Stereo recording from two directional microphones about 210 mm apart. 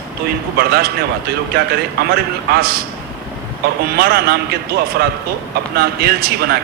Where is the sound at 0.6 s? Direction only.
50° right (ahead or behind).